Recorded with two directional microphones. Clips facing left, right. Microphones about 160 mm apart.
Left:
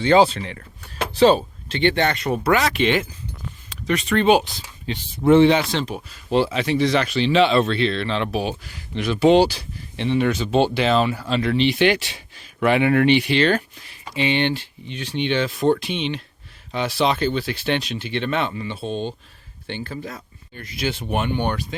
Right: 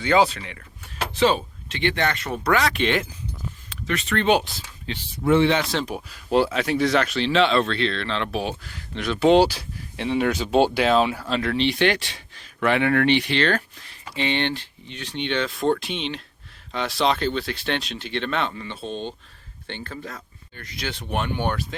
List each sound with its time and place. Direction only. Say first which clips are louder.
0.0 s speech: left 4 dB; 30° left (ahead or behind)
2.4 s speech: left 1 dB; 5° left (ahead or behind)
3.7 s speech: left 5 dB; 15° left (ahead or behind)
5.2 s speech: left 5 dB; 30° left (ahead or behind)
5.7 s speech: left 1 dB; 5° right (ahead or behind)